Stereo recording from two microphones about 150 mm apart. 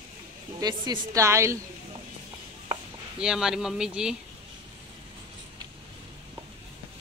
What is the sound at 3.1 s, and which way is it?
Speech, 5° right (ahead or behind).